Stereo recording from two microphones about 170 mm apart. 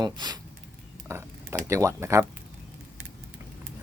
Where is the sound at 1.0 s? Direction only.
15° right (ahead or behind).